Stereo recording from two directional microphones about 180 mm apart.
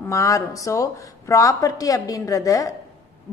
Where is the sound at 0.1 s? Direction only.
20° left (ahead or behind).